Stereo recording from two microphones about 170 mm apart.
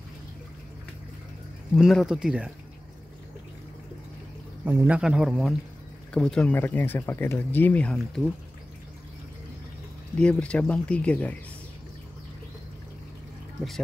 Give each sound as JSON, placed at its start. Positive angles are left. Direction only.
{"t": 1.8, "sound": "a man's voice", "side_deg": 0}
{"t": 4.6, "sound": "a man's voice", "side_deg": -10}
{"t": 10.1, "sound": "speech", "side_deg": 5}